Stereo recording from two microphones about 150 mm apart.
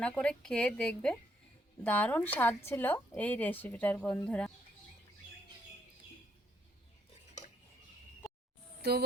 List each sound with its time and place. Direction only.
0.0 s a woman's voice: 5° left (ahead or behind)
8.8 s speech: 90° right